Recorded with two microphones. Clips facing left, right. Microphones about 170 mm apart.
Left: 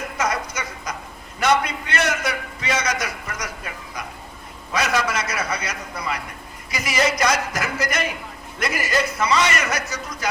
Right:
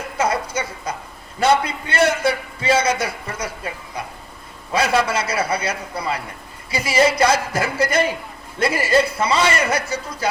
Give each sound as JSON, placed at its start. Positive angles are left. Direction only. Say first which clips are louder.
{"t": 0.2, "sound": "a man's voice", "louder": "right 4 dB", "side_deg": -30}